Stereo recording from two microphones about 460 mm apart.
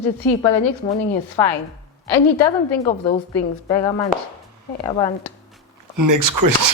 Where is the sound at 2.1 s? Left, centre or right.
Left.